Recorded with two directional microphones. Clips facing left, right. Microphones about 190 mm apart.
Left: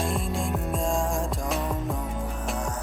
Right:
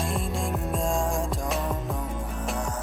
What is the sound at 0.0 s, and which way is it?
Music, centre (ahead or behind).